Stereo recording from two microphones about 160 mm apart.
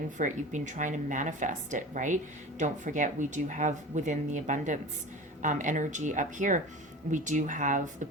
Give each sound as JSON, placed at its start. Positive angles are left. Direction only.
{"t": 0.2, "sound": "speech", "side_deg": -50}